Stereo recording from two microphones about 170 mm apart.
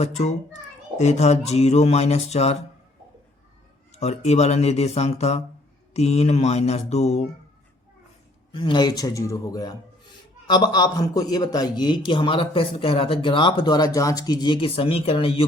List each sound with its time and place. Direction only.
0.0 s speech: 40° left (ahead or behind)
3.9 s speech: 40° left (ahead or behind)
8.5 s a man's voice: 30° left (ahead or behind)